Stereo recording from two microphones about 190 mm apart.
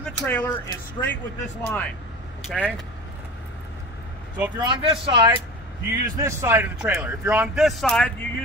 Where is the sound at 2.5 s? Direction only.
5° right (ahead or behind).